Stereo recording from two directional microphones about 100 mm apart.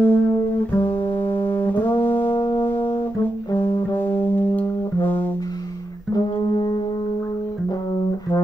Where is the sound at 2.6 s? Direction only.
20° left (ahead or behind).